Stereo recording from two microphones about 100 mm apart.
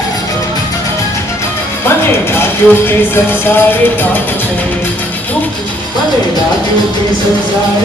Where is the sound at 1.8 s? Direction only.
25° left (ahead or behind).